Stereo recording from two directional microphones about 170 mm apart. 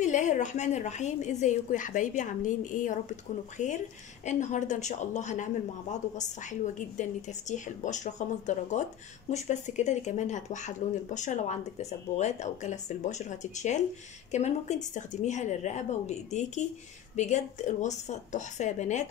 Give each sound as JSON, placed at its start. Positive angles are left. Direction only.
{"t": 0.0, "sound": "speech", "side_deg": 45}